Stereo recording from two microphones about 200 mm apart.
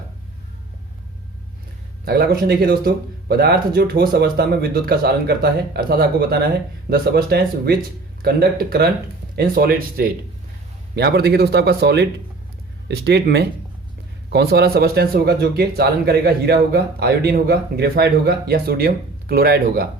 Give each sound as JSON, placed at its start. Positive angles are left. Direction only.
{"t": 2.0, "sound": "speech", "side_deg": -50}